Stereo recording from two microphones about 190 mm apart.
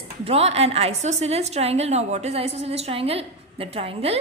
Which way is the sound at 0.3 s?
35° right (ahead or behind).